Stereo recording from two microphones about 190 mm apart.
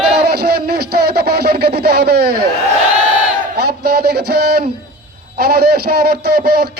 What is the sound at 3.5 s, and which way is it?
A man's voice, 55° right (ahead or behind).